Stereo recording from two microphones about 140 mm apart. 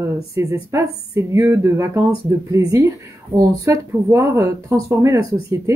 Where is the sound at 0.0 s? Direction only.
20° right (ahead or behind).